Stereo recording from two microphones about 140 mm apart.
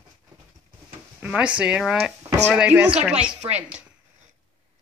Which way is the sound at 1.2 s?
10° right (ahead or behind).